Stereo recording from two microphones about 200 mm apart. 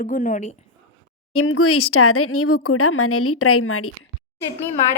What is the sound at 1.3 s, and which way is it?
Speech, 90° left.